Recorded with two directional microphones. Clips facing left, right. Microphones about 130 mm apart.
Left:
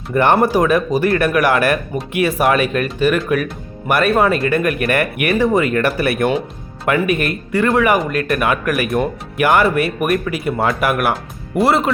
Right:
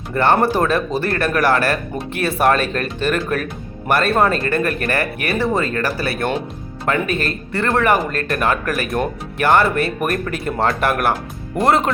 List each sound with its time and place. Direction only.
0.1 s a man's voice: 15° left (ahead or behind)